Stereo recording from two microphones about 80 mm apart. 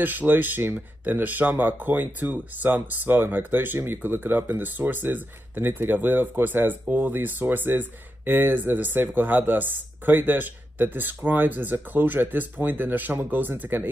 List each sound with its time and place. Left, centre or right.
0.0 s speech: right